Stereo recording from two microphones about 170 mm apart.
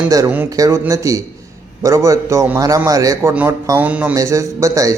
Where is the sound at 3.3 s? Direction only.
10° right (ahead or behind).